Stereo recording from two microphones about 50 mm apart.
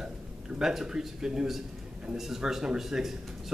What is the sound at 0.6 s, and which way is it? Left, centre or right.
Speech, centre.